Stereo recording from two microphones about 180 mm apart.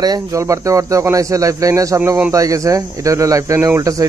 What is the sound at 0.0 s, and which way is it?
Speech, 20° right (ahead or behind).